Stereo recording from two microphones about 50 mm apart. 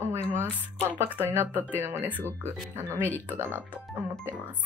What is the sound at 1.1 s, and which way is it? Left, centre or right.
Speech, right.